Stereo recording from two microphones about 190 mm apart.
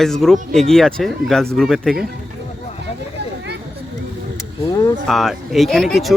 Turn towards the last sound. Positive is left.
turn(degrees=0)  # may be behind; listen again after turning